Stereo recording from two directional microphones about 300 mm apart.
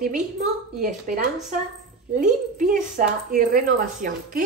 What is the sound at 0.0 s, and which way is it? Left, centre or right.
Speech, right.